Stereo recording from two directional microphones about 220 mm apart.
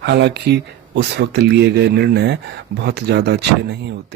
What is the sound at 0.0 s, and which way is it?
Speech, 50° right (ahead or behind).